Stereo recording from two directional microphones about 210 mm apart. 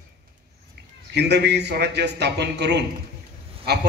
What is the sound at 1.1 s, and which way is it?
A man's voice, 55° right (ahead or behind).